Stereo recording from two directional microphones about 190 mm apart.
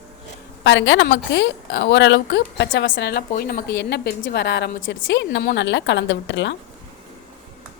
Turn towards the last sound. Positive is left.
turn(degrees=70)  # may be behind; listen again after turning